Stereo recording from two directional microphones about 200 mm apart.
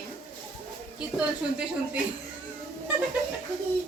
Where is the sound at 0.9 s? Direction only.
5° right (ahead or behind).